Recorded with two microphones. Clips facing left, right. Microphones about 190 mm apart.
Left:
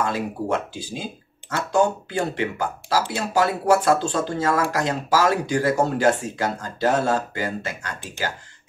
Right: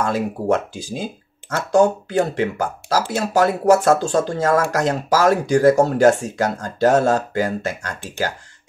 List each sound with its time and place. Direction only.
0.0 s speech: 45° right (ahead or behind)